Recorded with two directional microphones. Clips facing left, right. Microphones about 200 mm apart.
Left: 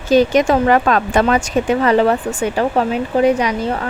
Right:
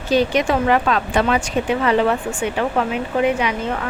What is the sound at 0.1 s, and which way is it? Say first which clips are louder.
Speech: left 5 dB; 45° left (ahead or behind).